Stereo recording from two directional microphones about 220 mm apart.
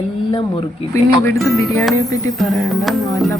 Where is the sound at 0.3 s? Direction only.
25° left (ahead or behind).